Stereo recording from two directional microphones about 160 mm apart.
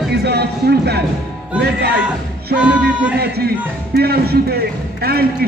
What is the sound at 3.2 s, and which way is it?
A man's voice, 80° right.